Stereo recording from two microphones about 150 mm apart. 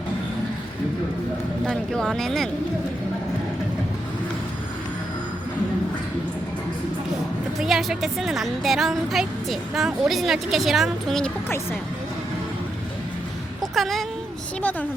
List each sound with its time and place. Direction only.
1.6 s speech: 5° left (ahead or behind)
7.6 s speech: centre (ahead or behind)
11.4 s speech: 15° left (ahead or behind)
13.7 s speech: centre (ahead or behind)
14.6 s speech: 10° left (ahead or behind)